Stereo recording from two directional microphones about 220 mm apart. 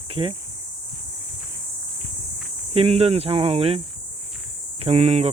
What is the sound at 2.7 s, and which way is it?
Speech, 25° right (ahead or behind).